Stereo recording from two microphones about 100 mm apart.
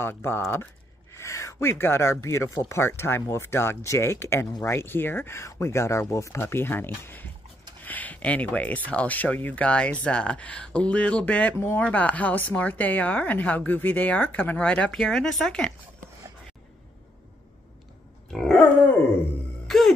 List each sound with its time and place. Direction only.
0.0 s a woman's voice: 25° left (ahead or behind); by 15.7 s 5° left (ahead or behind)
18.3 s a woman's voice: 5° left (ahead or behind)